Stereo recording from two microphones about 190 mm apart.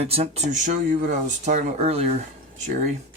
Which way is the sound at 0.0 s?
35° right (ahead or behind).